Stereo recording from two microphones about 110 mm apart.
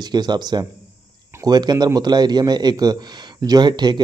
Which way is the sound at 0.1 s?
40° right (ahead or behind).